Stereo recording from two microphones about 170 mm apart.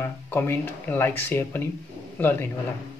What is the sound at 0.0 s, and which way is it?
A man's voice, 15° left (ahead or behind).